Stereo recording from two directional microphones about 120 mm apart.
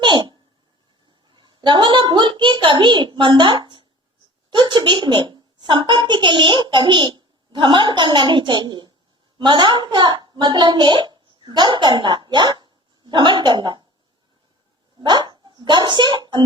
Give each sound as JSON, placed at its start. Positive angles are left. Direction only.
{"t": 0.0, "sound": "a sound", "side_deg": -40}
{"t": 1.3, "sound": "a woman's voice", "side_deg": -40}
{"t": 15.0, "sound": "speech", "side_deg": -35}